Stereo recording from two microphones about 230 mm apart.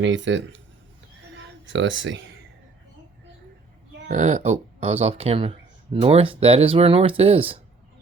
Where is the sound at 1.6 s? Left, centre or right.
Right.